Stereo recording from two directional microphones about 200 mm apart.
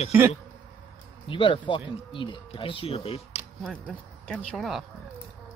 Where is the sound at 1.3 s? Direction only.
25° left (ahead or behind).